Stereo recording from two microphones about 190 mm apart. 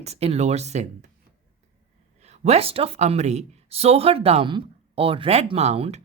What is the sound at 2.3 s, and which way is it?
Speech, 35° right (ahead or behind).